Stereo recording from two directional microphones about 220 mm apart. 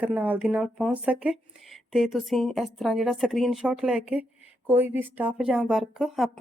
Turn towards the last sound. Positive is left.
turn(degrees=0)  # may be behind; listen again after turning